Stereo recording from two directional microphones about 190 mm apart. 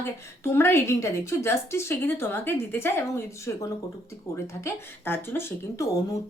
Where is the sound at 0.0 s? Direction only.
15° left (ahead or behind).